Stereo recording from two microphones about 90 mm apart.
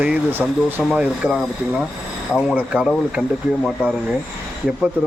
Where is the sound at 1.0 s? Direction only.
5° right (ahead or behind).